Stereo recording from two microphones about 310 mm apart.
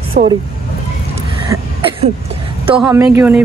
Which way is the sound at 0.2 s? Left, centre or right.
Right.